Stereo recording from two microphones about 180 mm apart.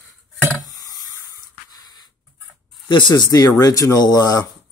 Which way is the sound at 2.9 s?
25° left (ahead or behind).